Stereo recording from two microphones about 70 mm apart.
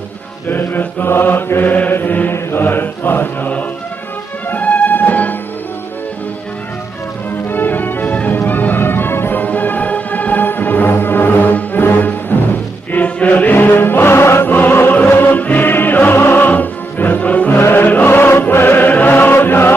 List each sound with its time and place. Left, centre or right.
0.5 s mantra: left
4.5 s music: left
7.4 s music: left
17.6 s music: left